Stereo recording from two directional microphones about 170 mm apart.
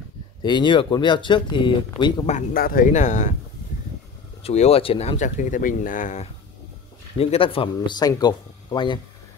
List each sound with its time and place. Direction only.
0.4 s speech: 25° left (ahead or behind)
2.2 s speech: 50° left (ahead or behind)
4.4 s speech: 35° left (ahead or behind)
7.2 s speech: 35° left (ahead or behind)